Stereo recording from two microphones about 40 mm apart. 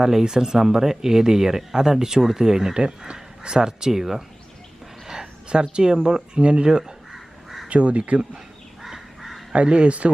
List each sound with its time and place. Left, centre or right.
0.0 s speech: centre
5.0 s a sound: centre
5.7 s speech: right
7.7 s speech: right
8.8 s bird: centre
9.5 s speech: right